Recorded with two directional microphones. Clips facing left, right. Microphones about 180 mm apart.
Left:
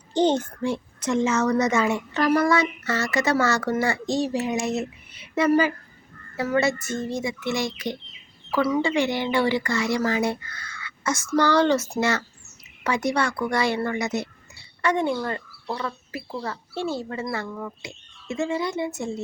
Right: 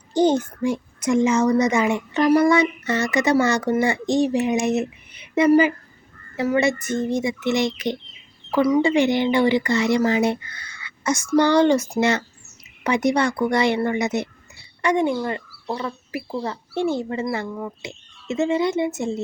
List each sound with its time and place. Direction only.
0.1 s a child's voice: 10° right (ahead or behind)